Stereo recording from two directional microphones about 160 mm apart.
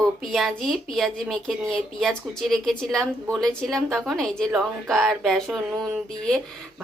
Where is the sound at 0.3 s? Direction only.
Centre (ahead or behind).